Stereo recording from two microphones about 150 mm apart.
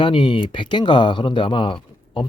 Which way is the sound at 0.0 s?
35° left (ahead or behind).